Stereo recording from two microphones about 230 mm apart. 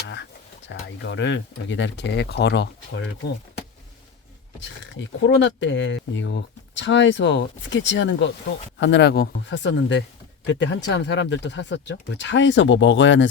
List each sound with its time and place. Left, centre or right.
0.7 s speech: left
4.6 s speech: left